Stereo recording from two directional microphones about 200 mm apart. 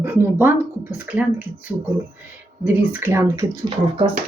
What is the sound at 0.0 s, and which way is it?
Speech, 10° right (ahead or behind).